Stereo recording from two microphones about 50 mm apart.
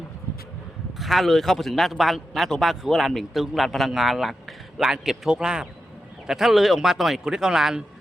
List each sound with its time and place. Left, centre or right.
0.9 s a man's voice: centre
6.2 s speech: centre